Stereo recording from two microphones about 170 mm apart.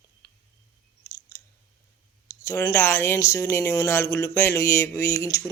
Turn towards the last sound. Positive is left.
turn(degrees=20)  # may be behind; listen again after turning